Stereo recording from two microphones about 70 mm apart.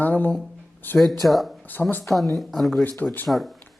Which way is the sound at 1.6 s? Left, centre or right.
Left.